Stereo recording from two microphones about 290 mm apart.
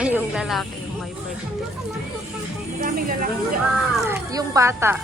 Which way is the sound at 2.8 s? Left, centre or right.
Right.